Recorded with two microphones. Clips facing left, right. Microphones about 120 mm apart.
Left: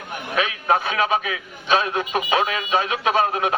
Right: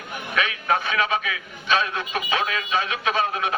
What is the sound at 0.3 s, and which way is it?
A man's voice, 35° left (ahead or behind).